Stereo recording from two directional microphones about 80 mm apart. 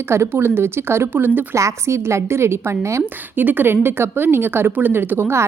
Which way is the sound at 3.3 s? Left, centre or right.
Right.